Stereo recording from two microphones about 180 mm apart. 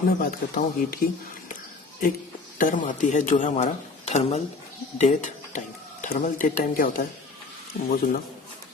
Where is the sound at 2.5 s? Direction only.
45° left (ahead or behind).